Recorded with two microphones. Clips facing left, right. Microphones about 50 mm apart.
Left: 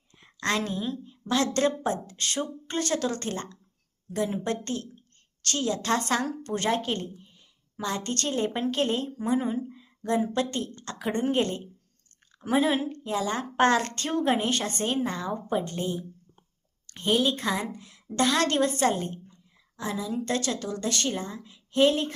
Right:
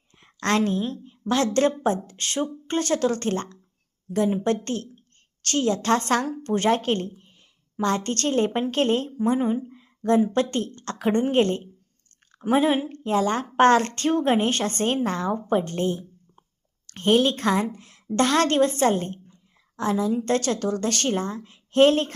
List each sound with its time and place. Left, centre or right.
0.3 s a woman's voice: right
10.3 s a woman's voice: right
12.5 s a woman's voice: right
12.9 s a woman's voice: right